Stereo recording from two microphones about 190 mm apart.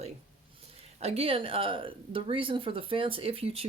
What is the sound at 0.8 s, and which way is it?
Speech, 35° right (ahead or behind).